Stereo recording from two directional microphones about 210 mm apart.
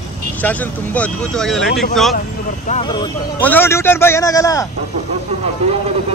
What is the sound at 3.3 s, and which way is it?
Speech, 10° left (ahead or behind).